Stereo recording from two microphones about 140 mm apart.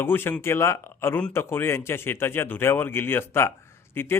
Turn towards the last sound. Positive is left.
turn(degrees=15)  # may be behind; listen again after turning